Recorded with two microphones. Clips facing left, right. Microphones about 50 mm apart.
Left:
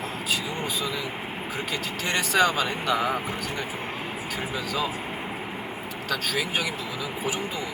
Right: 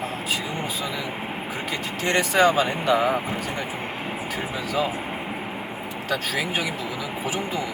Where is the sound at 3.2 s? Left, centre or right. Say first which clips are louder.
Right 2 dB; right.